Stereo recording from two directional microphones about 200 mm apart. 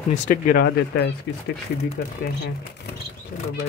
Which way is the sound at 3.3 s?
45° left (ahead or behind).